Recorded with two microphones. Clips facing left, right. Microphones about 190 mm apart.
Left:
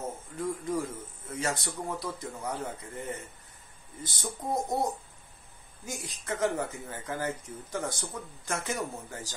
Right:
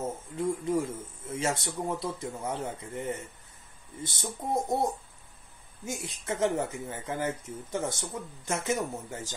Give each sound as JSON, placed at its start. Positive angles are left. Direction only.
{"t": 0.4, "sound": "speech", "side_deg": -25}
{"t": 5.9, "sound": "speech", "side_deg": -25}